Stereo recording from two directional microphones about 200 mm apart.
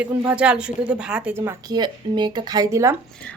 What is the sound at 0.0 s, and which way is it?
Speech, 5° right (ahead or behind).